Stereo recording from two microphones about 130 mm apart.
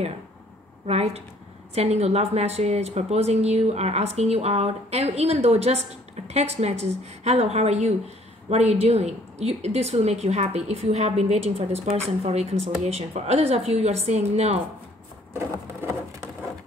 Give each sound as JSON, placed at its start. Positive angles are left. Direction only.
{"t": 0.8, "sound": "a woman's voice", "side_deg": -55}
{"t": 15.3, "sound": "patter", "side_deg": -20}